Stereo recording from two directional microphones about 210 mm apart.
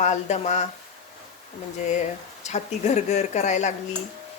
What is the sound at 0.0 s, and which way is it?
Speech, 35° left (ahead or behind).